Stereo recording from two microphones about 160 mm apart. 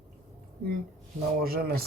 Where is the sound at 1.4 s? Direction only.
70° right (ahead or behind).